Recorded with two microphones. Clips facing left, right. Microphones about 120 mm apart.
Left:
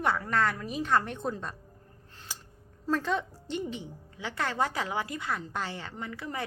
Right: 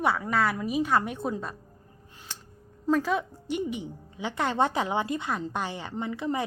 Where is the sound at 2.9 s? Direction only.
10° right (ahead or behind).